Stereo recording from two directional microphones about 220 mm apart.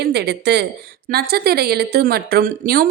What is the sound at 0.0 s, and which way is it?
A woman's voice, 50° right (ahead or behind).